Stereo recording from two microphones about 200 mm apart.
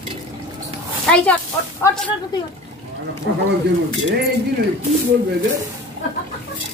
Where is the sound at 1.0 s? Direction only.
5° left (ahead or behind).